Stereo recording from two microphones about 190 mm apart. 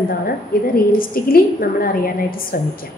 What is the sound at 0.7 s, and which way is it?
A woman's voice, 50° left (ahead or behind).